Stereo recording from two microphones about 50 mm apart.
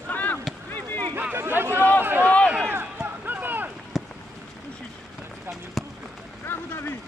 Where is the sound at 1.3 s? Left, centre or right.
Right.